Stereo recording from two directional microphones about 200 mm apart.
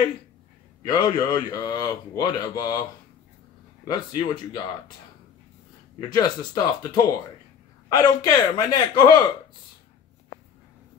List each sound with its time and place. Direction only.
0.8 s speech: 20° left (ahead or behind)
3.8 s speech: 20° left (ahead or behind)
6.0 s speech: 20° left (ahead or behind)